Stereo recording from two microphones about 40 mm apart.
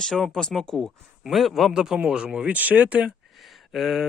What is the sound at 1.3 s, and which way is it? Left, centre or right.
Speech, centre.